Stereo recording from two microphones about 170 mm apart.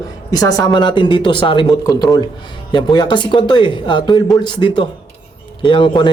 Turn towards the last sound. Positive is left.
turn(degrees=30)  # may be behind; listen again after turning